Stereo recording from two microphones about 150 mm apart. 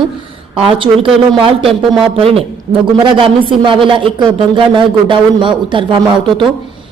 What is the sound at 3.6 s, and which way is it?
A man's voice, 35° right (ahead or behind).